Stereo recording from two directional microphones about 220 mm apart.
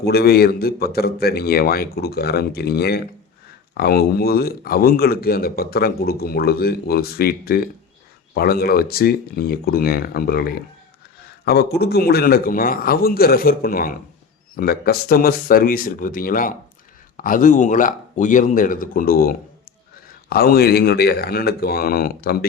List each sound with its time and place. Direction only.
0.1 s speech: 45° left (ahead or behind)
11.4 s a man's voice: 45° left (ahead or behind)